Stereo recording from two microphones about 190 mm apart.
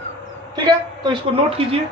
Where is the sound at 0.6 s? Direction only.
25° right (ahead or behind).